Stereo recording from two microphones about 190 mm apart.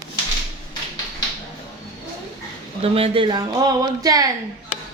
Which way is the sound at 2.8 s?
30° right (ahead or behind).